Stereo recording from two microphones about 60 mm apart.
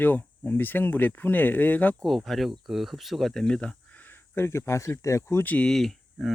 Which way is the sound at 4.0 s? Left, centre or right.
Left.